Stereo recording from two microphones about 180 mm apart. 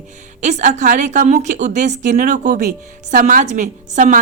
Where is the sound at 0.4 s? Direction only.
40° right (ahead or behind).